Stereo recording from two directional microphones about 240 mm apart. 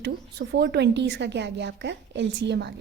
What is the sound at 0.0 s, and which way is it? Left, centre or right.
A woman's voice, right.